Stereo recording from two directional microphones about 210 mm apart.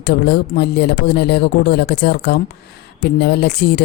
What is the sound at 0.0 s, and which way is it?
Speech, 50° left (ahead or behind).